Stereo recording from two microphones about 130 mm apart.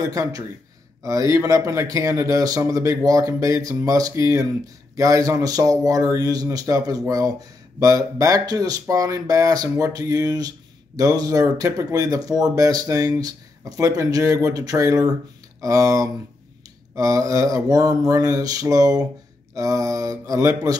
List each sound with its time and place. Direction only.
0.0 s speech: 25° right (ahead or behind)